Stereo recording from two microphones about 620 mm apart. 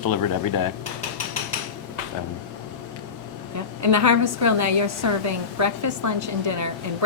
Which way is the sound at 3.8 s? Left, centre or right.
Right.